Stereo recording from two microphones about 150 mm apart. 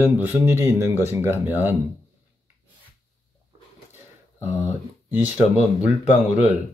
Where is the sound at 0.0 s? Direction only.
15° right (ahead or behind).